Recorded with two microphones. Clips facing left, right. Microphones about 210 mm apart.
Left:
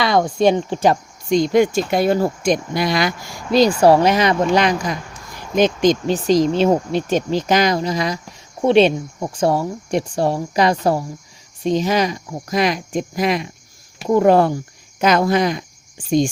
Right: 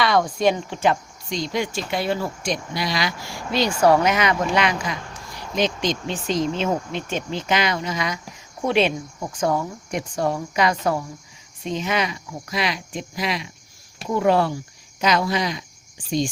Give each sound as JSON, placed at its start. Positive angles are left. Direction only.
{"t": 0.0, "sound": "speech", "side_deg": 25}